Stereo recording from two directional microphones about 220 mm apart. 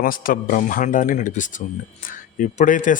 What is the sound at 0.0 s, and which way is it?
Speech, 40° left (ahead or behind).